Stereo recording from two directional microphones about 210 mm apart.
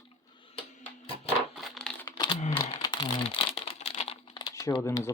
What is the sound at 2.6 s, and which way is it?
Crumpling, 20° left (ahead or behind).